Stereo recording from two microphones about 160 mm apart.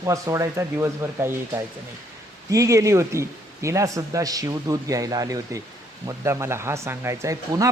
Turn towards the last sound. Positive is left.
turn(degrees=-20)  # may be behind; listen again after turning